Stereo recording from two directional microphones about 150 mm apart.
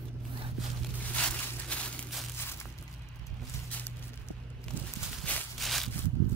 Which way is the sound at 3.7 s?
10° left (ahead or behind).